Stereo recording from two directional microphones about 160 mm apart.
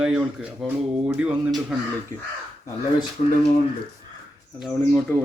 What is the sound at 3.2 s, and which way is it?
Speech, 45° left (ahead or behind).